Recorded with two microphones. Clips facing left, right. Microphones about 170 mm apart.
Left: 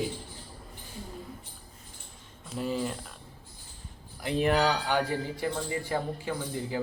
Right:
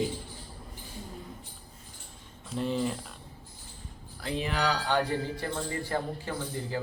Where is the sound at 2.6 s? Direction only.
Centre (ahead or behind).